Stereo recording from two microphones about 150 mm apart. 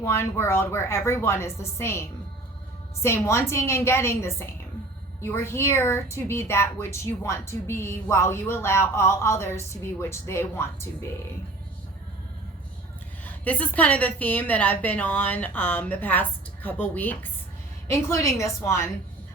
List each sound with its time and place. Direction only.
0.0 s a woman's voice: 15° left (ahead or behind)
13.2 s a sound: 10° left (ahead or behind)
13.7 s a woman's voice: 10° left (ahead or behind)